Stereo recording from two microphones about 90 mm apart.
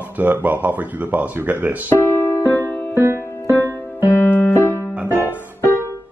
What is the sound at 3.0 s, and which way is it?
Music, 30° right (ahead or behind).